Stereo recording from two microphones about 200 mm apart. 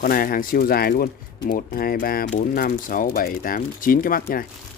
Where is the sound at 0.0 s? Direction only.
45° left (ahead or behind).